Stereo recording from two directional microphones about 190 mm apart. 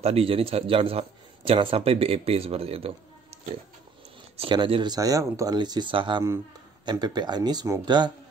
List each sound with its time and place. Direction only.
0.0 s speech: 30° right (ahead or behind)
4.4 s speech: 25° right (ahead or behind)